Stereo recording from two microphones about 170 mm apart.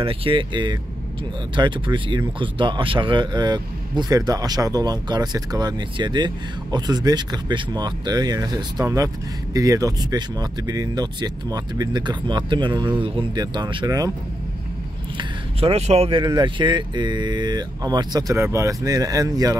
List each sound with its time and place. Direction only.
0.0 s speech: 30° right (ahead or behind)
15.1 s speech: 35° right (ahead or behind)